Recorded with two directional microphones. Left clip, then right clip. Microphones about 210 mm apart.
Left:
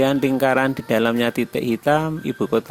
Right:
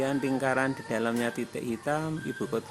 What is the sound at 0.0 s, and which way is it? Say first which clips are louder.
Speech: left 10 dB; 40° left (ahead or behind).